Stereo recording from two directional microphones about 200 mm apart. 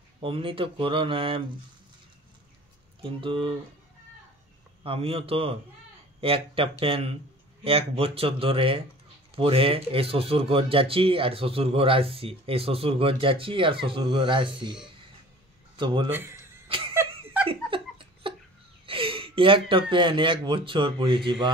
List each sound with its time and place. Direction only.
0.2 s speech: 25° right (ahead or behind)
3.0 s speech: 25° right (ahead or behind)
4.8 s speech: 30° right (ahead or behind)
16.1 s a sound: 10° right (ahead or behind)
16.6 s a sound: 25° right (ahead or behind)
17.5 s laughter: 25° right (ahead or behind)
18.9 s speech: 25° right (ahead or behind)